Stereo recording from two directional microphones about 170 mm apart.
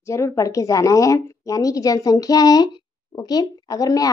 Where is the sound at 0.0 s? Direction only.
15° left (ahead or behind).